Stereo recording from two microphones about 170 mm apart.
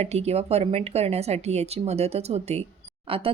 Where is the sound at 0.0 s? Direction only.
40° right (ahead or behind).